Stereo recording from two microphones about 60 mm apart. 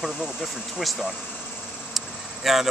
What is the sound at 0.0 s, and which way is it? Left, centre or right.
Speech, centre.